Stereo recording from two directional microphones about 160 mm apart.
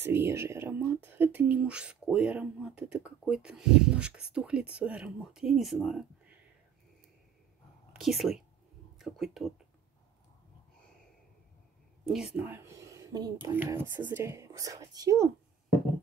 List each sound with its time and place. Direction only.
0.0 s speech: 15° right (ahead or behind)
8.0 s speech: centre (ahead or behind)
12.1 s speech: centre (ahead or behind)
12.4 s speech: 15° right (ahead or behind)